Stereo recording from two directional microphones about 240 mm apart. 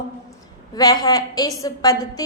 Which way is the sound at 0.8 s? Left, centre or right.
Centre.